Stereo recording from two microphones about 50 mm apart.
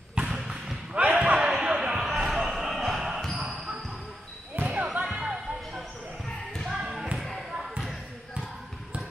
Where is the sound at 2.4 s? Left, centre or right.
Centre.